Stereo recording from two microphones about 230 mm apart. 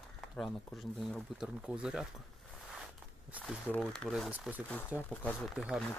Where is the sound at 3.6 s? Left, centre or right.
Centre.